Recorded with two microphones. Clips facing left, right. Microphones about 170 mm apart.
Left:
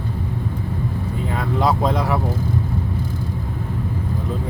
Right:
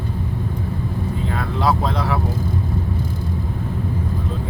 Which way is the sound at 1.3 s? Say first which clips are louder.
Left 2 dB; 20° left (ahead or behind).